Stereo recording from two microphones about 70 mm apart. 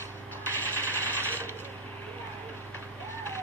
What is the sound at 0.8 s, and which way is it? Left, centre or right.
Sewing machine, left.